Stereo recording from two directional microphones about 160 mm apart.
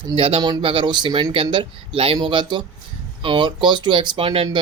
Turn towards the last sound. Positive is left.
turn(degrees=-35)  # may be behind; listen again after turning